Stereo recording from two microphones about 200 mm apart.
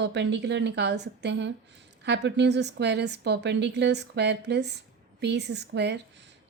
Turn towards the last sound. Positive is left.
turn(degrees=-60)  # may be behind; listen again after turning